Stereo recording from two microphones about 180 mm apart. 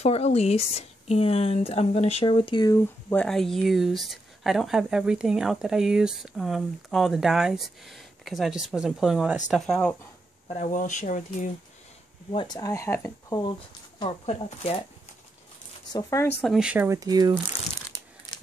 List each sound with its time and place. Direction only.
0.0 s speech: 35° left (ahead or behind)
3.1 s speech: 5° left (ahead or behind)
10.5 s speech: 40° left (ahead or behind)
12.3 s speech: 25° left (ahead or behind)
15.9 s speech: 20° left (ahead or behind)
16.3 s speech: centre (ahead or behind); by 17.3 s 20° right (ahead or behind)